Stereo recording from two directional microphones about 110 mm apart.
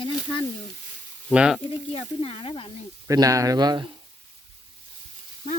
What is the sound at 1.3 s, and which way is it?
Speech, 5° right (ahead or behind).